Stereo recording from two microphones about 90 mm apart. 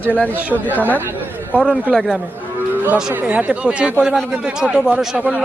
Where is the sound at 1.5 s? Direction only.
10° right (ahead or behind).